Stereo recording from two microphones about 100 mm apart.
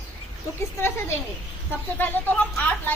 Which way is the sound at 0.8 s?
25° left (ahead or behind).